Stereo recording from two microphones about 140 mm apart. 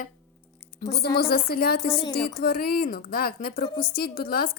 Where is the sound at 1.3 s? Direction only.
90° left.